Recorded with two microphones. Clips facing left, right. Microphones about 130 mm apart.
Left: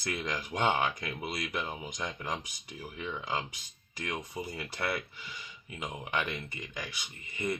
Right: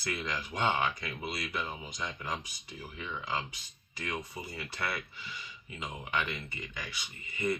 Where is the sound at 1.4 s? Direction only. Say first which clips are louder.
Left 1 dB; 15° left (ahead or behind).